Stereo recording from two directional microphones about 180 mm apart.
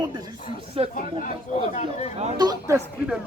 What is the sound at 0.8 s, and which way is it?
Speech, 30° right (ahead or behind).